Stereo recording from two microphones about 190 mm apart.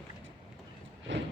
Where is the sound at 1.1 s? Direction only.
70° right (ahead or behind).